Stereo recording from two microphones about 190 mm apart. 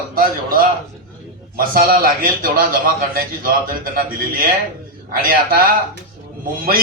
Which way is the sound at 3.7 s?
50° right (ahead or behind).